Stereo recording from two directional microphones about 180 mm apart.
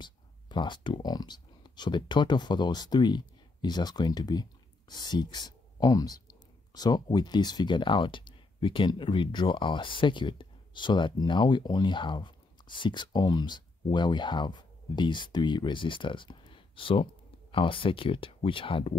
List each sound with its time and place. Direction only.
0.0 s speech: 25° left (ahead or behind)